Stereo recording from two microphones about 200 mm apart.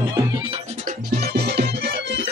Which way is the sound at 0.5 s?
35° right (ahead or behind).